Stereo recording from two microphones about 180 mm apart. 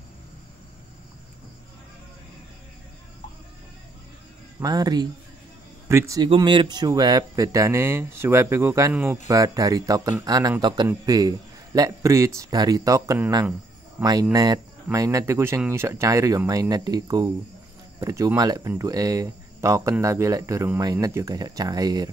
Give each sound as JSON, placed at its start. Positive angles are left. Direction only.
{"t": 4.6, "sound": "speech", "side_deg": -20}
{"t": 14.0, "sound": "speech", "side_deg": -5}
{"t": 14.3, "sound": "speech", "side_deg": -20}